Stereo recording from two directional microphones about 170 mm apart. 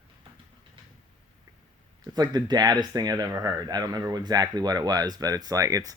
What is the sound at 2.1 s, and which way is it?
Speech, 25° right (ahead or behind).